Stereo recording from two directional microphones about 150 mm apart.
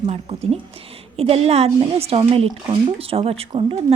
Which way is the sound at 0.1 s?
45° right (ahead or behind).